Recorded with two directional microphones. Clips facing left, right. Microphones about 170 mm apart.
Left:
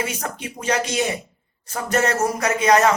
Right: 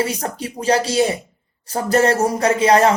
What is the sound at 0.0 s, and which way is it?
Speech, 35° right (ahead or behind).